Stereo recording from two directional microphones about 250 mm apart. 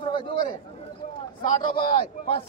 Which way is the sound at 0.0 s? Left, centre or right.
Centre.